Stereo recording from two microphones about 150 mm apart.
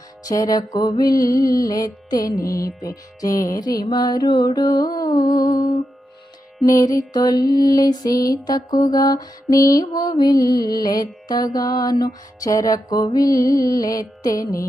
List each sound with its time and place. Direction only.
0.3 s mantra: 25° left (ahead or behind)
2.4 s mantra: 80° left
2.8 s mantra: 25° left (ahead or behind)
6.7 s mantra: 20° left (ahead or behind)
7.4 s mantra: 85° left
7.8 s mantra: 25° left (ahead or behind)